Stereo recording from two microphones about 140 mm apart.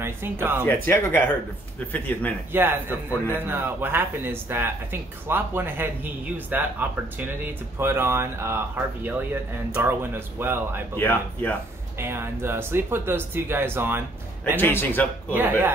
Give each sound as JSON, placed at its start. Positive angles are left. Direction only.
{"t": 0.0, "sound": "speech", "side_deg": -15}
{"t": 0.7, "sound": "speech", "side_deg": 15}
{"t": 2.5, "sound": "speech", "side_deg": -15}
{"t": 11.0, "sound": "speech", "side_deg": 15}
{"t": 12.0, "sound": "speech", "side_deg": -15}
{"t": 14.6, "sound": "speech", "side_deg": 15}